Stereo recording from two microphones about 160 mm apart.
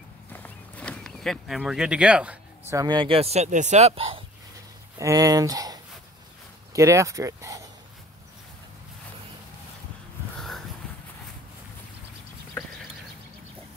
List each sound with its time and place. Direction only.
0.3 s a sound: 10° left (ahead or behind); by 2.3 s 5° right (ahead or behind)
2.7 s speech: 25° right (ahead or behind)
4.9 s speech: 20° right (ahead or behind)